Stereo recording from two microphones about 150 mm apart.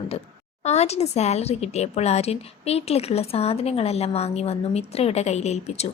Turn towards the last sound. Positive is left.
turn(degrees=45)  # may be behind; listen again after turning